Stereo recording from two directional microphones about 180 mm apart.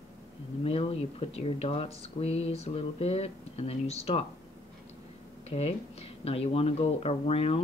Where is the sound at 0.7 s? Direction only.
30° left (ahead or behind).